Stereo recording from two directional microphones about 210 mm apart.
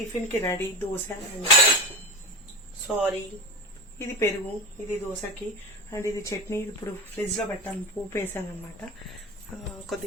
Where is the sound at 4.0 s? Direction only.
10° left (ahead or behind).